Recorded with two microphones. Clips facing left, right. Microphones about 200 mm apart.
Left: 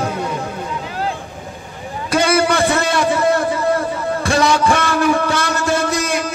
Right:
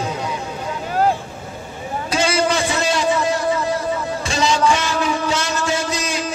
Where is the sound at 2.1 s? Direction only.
55° left (ahead or behind).